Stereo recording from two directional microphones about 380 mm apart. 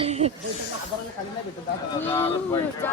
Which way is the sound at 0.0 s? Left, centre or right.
Centre.